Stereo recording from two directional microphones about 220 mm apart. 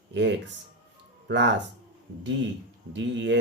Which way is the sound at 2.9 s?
55° right (ahead or behind).